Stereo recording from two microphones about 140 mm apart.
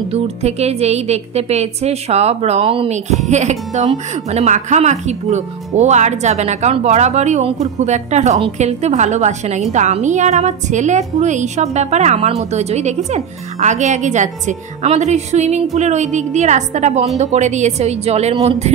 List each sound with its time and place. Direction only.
0.1 s a woman's voice: 50° right (ahead or behind)